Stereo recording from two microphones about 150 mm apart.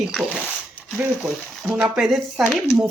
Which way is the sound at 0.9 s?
5° right (ahead or behind).